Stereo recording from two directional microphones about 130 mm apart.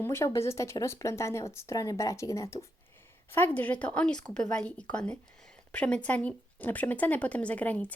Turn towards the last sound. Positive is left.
turn(degrees=10)  # may be behind; listen again after turning